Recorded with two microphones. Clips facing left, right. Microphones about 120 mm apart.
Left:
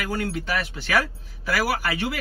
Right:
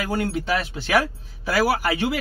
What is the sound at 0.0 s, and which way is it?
Speech, 20° right (ahead or behind).